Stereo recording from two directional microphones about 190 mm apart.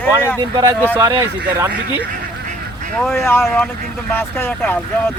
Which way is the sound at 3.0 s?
5° left (ahead or behind).